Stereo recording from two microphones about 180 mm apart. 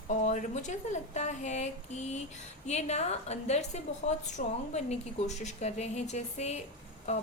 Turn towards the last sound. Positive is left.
turn(degrees=35)  # may be behind; listen again after turning